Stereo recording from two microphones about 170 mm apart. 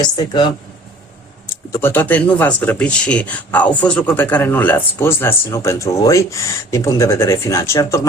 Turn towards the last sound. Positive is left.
turn(degrees=15)  # may be behind; listen again after turning